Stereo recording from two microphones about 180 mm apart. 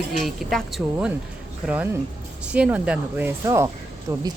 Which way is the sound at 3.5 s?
20° right (ahead or behind).